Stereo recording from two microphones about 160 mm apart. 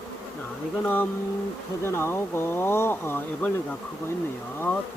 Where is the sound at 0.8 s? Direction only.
10° left (ahead or behind).